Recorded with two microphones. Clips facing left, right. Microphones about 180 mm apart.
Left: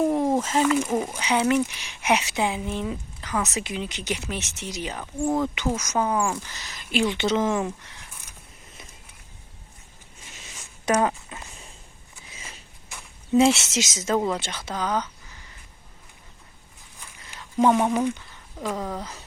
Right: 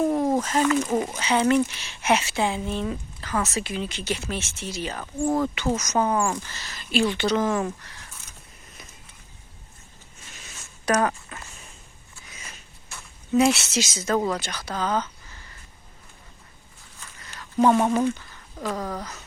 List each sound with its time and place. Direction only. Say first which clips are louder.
0.0 s speech: even; centre (ahead or behind)
5.2 s speech: right 1 dB; centre (ahead or behind)
5.5 s speech: right 1 dB; 10° left (ahead or behind)
10.5 s a sound: even; 20° left (ahead or behind)
12.9 s a sound: left 1 dB; 15° left (ahead or behind)
13.3 s speech: left 1 dB; 25° left (ahead or behind)
17.2 s speech: right 1 dB; 15° left (ahead or behind)
18.6 s speech: even; centre (ahead or behind)